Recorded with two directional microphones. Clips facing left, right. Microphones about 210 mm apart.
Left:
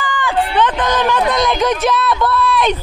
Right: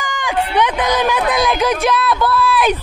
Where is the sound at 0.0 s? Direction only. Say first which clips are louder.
Left 2 dB; 15° right (ahead or behind).